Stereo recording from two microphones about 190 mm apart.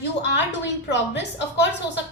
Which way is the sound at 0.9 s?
65° left (ahead or behind).